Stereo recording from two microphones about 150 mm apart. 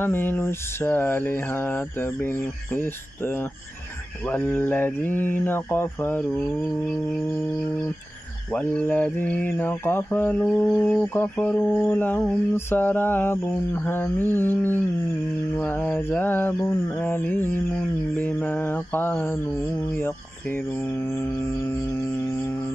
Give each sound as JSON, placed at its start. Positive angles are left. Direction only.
{"t": 0.0, "sound": "mantra", "side_deg": 15}
{"t": 8.5, "sound": "mantra", "side_deg": 10}
{"t": 21.1, "sound": "mantra", "side_deg": 15}